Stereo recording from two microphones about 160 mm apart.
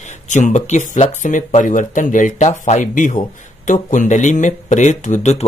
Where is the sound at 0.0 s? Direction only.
50° left (ahead or behind).